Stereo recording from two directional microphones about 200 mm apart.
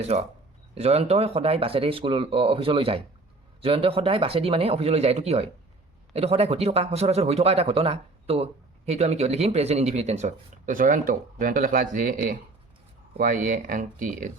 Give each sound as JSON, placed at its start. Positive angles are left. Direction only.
{"t": 0.0, "sound": "speech", "side_deg": -30}